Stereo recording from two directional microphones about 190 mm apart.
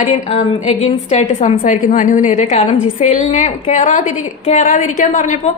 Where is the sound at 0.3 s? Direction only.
35° left (ahead or behind).